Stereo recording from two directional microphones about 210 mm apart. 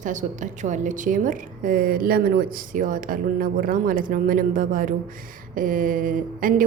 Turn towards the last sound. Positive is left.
turn(degrees=-40)  # may be behind; listen again after turning